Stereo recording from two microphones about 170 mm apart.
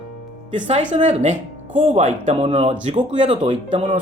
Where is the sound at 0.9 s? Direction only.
40° right (ahead or behind).